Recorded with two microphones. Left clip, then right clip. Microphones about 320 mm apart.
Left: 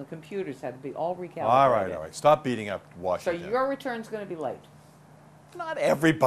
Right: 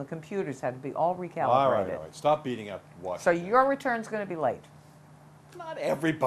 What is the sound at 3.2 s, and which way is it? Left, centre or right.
Speech, right.